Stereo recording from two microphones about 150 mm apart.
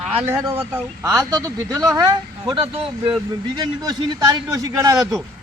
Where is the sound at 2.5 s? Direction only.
40° right (ahead or behind).